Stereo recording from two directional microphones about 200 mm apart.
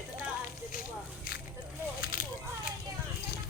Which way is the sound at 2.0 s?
45° left (ahead or behind).